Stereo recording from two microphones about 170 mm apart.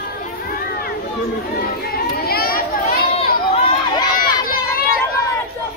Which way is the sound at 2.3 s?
60° left (ahead or behind).